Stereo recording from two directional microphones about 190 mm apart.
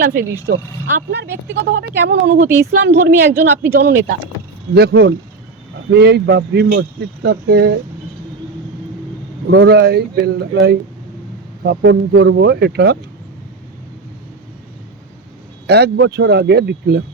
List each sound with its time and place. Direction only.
0.0 s speech: 50° right (ahead or behind)
1.5 s a woman's voice: 70° right (ahead or behind)
2.0 s speech: 55° right (ahead or behind)
9.5 s speech: 65° right (ahead or behind)
15.6 s speech: 60° right (ahead or behind)